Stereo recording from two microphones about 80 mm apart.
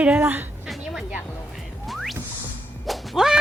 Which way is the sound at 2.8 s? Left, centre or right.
Centre.